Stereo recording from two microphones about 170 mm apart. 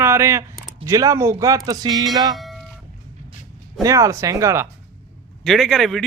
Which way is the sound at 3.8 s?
20° right (ahead or behind).